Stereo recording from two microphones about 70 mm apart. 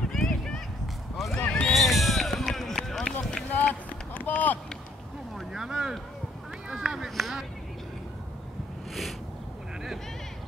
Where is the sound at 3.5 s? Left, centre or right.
Left.